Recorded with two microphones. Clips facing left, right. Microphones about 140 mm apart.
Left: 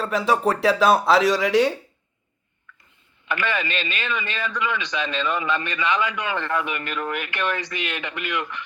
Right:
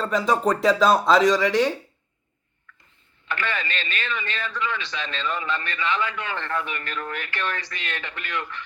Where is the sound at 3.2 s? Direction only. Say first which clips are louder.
Left 3 dB; 15° left (ahead or behind).